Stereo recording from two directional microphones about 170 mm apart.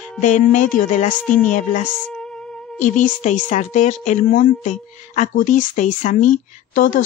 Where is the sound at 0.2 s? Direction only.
45° left (ahead or behind).